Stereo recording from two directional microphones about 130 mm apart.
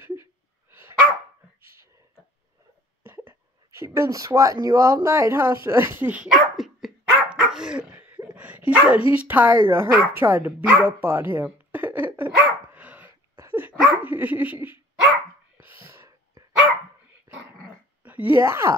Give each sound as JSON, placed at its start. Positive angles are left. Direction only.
{"t": 0.7, "sound": "dog", "side_deg": -15}
{"t": 1.6, "sound": "a sound", "side_deg": -20}
{"t": 3.0, "sound": "speech", "side_deg": -20}
{"t": 7.3, "sound": "dog", "side_deg": -5}
{"t": 7.9, "sound": "a sound", "side_deg": -15}
{"t": 8.4, "sound": "dog", "side_deg": -10}
{"t": 9.3, "sound": "a woman's voice", "side_deg": -15}
{"t": 9.7, "sound": "dog", "side_deg": -15}
{"t": 13.4, "sound": "laughter", "side_deg": -15}
{"t": 15.0, "sound": "dog", "side_deg": -25}
{"t": 18.0, "sound": "speech", "side_deg": -15}